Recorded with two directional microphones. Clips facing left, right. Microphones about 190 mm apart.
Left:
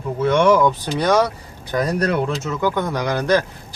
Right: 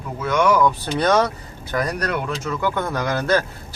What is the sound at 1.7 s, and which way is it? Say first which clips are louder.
Speech: left 4 dB; 25° left (ahead or behind).